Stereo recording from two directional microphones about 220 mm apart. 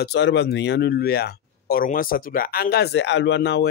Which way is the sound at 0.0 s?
50° left (ahead or behind).